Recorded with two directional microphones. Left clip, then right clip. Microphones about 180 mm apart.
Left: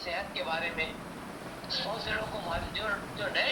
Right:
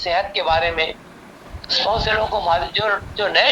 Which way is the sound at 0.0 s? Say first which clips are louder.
Right 15 dB; 55° right (ahead or behind).